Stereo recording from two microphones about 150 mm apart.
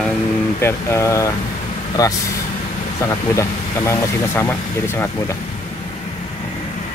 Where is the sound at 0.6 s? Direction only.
15° left (ahead or behind).